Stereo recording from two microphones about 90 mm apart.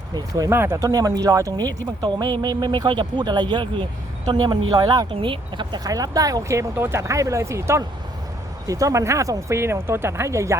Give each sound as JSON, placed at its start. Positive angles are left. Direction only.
{"t": 0.1, "sound": "speech", "side_deg": -45}
{"t": 0.5, "sound": "speech", "side_deg": -25}
{"t": 0.8, "sound": "speech", "side_deg": -40}
{"t": 2.0, "sound": "speech", "side_deg": -60}
{"t": 4.4, "sound": "speech", "side_deg": -45}
{"t": 5.2, "sound": "speech", "side_deg": -65}
{"t": 5.8, "sound": "speech", "side_deg": -40}